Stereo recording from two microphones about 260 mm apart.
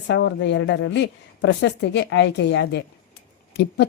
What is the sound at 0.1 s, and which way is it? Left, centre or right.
A woman's voice, left.